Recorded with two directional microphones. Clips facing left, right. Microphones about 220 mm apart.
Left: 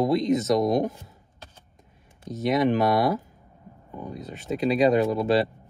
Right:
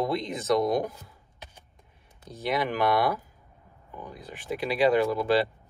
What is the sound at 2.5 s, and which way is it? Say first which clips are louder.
Speech: left 4 dB; 25° left (ahead or behind).